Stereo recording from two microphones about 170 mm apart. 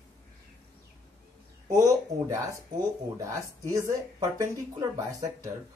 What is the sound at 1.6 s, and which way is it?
Speech, 20° right (ahead or behind).